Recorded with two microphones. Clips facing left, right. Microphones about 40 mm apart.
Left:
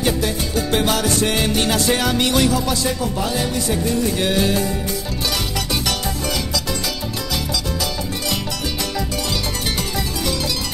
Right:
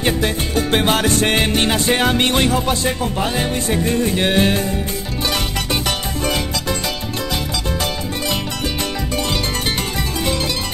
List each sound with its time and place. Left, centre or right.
0.0 s music: right